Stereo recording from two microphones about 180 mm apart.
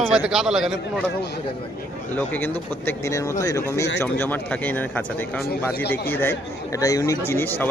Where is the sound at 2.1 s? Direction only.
10° left (ahead or behind).